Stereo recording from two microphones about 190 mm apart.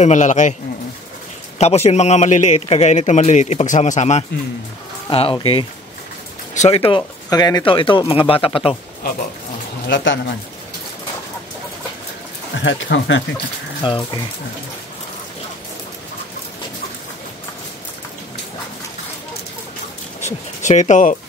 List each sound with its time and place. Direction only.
0.0 s a man's voice: 40° left (ahead or behind)
1.6 s a man's voice: 35° left (ahead or behind)
9.8 s speech: 70° left (ahead or behind)
12.5 s speech: 80° left
13.8 s speech: 25° left (ahead or behind)
20.2 s speech: 40° left (ahead or behind)